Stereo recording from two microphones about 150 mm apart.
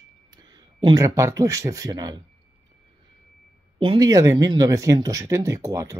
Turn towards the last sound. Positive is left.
turn(degrees=-20)  # may be behind; listen again after turning